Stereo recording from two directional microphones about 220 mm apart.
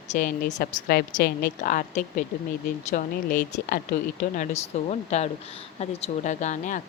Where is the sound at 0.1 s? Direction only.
35° left (ahead or behind).